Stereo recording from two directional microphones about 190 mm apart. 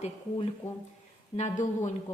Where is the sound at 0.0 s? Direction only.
30° left (ahead or behind).